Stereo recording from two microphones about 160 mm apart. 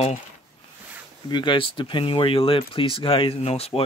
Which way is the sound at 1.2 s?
30° left (ahead or behind).